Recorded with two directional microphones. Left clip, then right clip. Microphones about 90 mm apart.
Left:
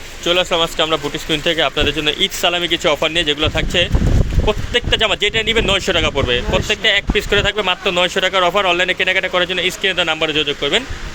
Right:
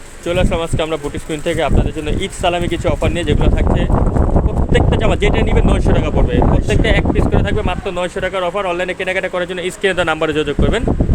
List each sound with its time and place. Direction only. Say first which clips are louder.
0.3 s speech: left 2 dB; 20° right (ahead or behind)
1.5 s speech: left 1 dB; 10° right (ahead or behind)
4.4 s speech: even; 25° right (ahead or behind)
4.9 s speech: even; 15° right (ahead or behind)
8.2 s speech: left 2 dB; 10° left (ahead or behind)
8.7 s speech: left 3 dB; 5° right (ahead or behind)
9.8 s speech: right 4 dB; 70° right (ahead or behind); by 10.8 s 90° right